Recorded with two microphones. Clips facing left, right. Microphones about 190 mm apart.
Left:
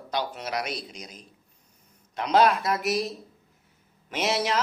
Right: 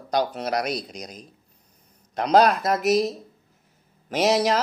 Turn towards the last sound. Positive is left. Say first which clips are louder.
# right 6 dB
turn(degrees=-40)  # may be behind; listen again after turning